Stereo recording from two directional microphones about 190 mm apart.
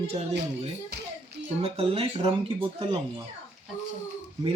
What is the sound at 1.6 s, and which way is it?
Speech, 30° right (ahead or behind).